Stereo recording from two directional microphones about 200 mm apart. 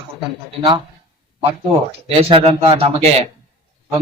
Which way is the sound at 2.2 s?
30° right (ahead or behind).